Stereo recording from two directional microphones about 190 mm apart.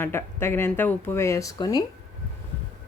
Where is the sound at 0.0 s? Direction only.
10° left (ahead or behind).